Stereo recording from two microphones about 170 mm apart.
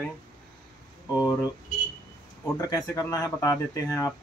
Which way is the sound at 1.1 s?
20° left (ahead or behind).